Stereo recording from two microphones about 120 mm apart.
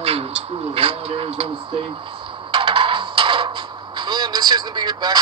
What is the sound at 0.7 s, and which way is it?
Speech, 55° right (ahead or behind).